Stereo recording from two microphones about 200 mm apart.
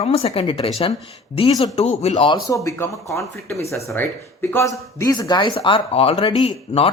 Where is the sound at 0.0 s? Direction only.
30° left (ahead or behind).